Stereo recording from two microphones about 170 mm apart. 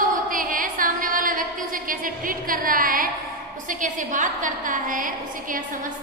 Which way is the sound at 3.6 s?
50° right (ahead or behind).